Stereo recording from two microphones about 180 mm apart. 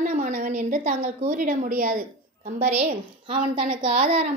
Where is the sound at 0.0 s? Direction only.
45° right (ahead or behind).